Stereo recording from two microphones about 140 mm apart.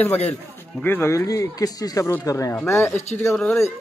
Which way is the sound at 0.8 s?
15° left (ahead or behind).